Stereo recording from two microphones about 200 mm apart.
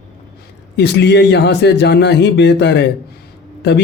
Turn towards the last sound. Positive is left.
turn(degrees=60)  # may be behind; listen again after turning